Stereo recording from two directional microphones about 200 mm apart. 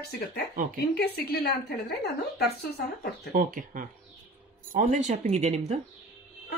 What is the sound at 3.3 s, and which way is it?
Speech, 40° right (ahead or behind).